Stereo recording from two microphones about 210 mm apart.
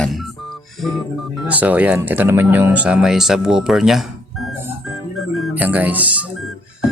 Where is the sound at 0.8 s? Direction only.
Centre (ahead or behind).